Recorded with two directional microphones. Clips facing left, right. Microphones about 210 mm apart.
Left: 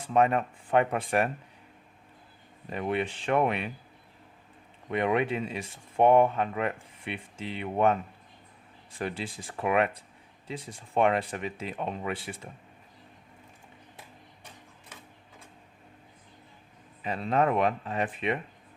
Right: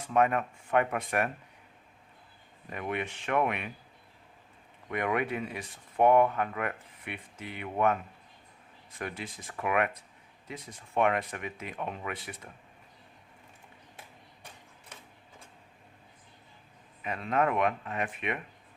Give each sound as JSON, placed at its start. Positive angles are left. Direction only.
{"t": 0.1, "sound": "speech", "side_deg": 30}
{"t": 2.6, "sound": "speech", "side_deg": 30}
{"t": 4.9, "sound": "speech", "side_deg": 25}
{"t": 17.0, "sound": "speech", "side_deg": 30}